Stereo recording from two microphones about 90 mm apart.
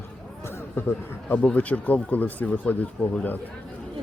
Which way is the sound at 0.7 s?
25° left (ahead or behind).